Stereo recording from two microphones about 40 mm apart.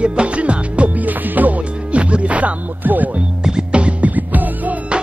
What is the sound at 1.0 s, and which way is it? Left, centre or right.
Music, right.